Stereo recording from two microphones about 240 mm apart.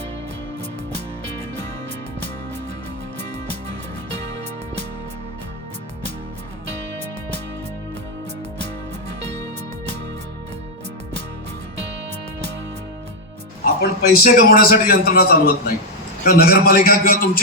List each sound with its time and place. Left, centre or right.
13.8 s a man's voice: left